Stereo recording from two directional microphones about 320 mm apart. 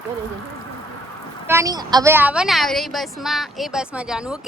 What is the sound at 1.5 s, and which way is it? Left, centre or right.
A woman's voice, centre.